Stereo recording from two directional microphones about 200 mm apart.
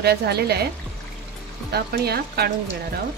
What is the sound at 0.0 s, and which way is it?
Speech, 55° right (ahead or behind).